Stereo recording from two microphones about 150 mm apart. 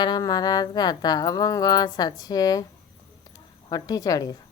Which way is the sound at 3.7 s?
25° left (ahead or behind).